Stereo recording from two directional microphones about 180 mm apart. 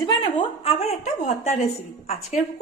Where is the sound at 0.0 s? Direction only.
25° left (ahead or behind).